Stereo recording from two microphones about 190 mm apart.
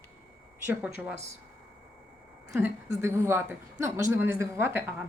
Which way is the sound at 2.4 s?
15° right (ahead or behind).